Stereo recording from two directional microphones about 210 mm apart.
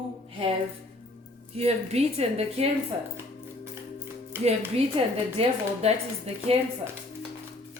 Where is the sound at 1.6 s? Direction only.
30° right (ahead or behind).